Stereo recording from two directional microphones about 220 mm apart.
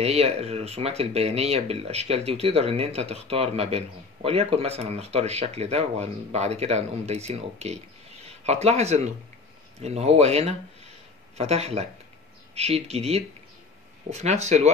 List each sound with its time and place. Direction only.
0.0 s speech: 30° right (ahead or behind)